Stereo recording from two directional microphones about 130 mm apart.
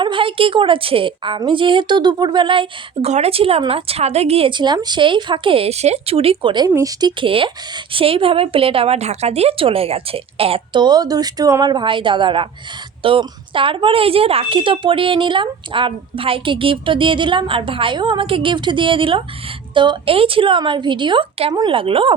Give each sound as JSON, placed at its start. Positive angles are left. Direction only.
{"t": 0.0, "sound": "a woman's voice", "side_deg": -40}
{"t": 3.1, "sound": "a woman's voice", "side_deg": -55}
{"t": 6.7, "sound": "speech", "side_deg": -25}
{"t": 7.2, "sound": "a woman's voice", "side_deg": -40}